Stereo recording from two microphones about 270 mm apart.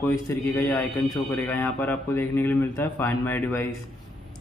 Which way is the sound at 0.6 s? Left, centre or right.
Centre.